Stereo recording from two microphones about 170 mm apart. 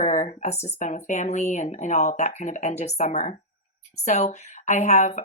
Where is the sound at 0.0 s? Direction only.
45° left (ahead or behind).